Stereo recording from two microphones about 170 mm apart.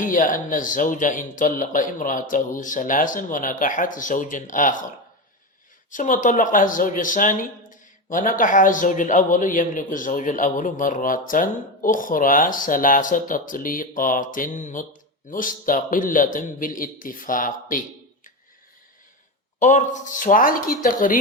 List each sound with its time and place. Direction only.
0.0 s speech: 55° left (ahead or behind)
5.9 s speech: 50° left (ahead or behind)
19.5 s speech: 45° left (ahead or behind)